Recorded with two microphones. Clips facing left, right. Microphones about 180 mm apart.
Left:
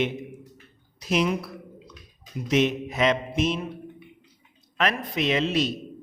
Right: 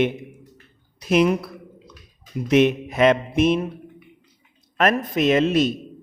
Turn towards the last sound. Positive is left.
turn(degrees=-50)  # may be behind; listen again after turning